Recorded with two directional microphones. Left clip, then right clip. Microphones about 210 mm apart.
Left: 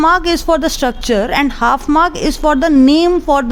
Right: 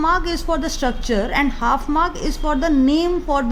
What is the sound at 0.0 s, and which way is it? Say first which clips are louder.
A woman's voice: left 7 dB; 35° left (ahead or behind).